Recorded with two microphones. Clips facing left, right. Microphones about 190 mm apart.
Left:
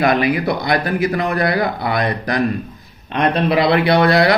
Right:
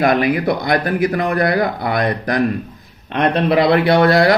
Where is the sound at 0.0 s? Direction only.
50° right (ahead or behind).